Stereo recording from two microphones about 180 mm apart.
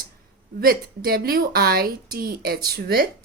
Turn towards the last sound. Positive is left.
turn(degrees=-60)  # may be behind; listen again after turning